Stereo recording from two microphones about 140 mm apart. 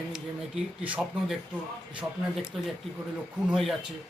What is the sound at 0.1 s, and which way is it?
Speech, 5° right (ahead or behind).